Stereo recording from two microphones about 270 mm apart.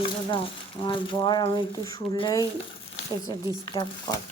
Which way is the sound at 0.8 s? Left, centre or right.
Centre.